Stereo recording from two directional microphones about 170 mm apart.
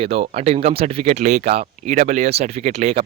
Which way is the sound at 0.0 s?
35° right (ahead or behind).